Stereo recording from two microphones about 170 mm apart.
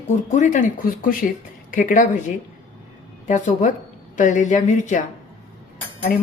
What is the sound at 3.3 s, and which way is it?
Speech, 45° left (ahead or behind).